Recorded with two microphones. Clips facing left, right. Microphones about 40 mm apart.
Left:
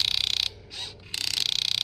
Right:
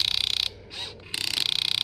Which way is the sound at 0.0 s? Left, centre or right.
Centre.